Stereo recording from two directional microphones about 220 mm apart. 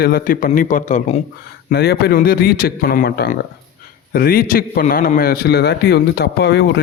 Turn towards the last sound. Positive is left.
turn(degrees=50)  # may be behind; listen again after turning